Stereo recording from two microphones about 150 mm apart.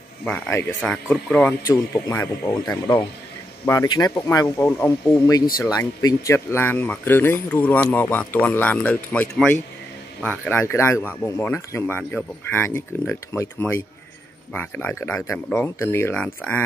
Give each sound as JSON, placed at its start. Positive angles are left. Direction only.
{"t": 0.2, "sound": "speech", "side_deg": 15}
{"t": 1.7, "sound": "speech", "side_deg": 25}